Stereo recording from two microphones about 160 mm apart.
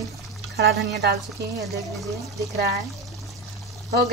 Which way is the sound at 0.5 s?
90° right.